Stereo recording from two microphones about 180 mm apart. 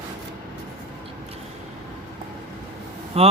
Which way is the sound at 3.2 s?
35° right (ahead or behind).